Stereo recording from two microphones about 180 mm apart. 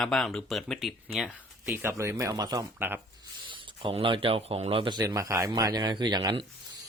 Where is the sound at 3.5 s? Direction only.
30° right (ahead or behind).